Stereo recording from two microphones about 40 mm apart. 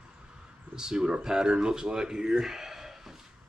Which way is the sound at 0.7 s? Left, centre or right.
Centre.